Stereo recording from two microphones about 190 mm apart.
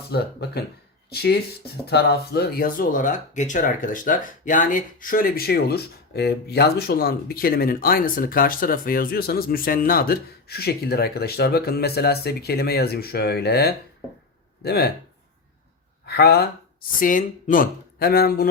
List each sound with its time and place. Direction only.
0.1 s speech: 60° left (ahead or behind)
16.0 s speech: 55° left (ahead or behind)
17.0 s speech: 45° left (ahead or behind)